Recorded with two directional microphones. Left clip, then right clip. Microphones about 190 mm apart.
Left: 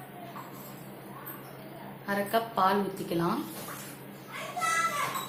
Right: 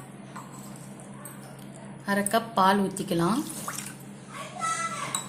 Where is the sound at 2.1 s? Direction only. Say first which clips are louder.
Right 3 dB; 55° right (ahead or behind).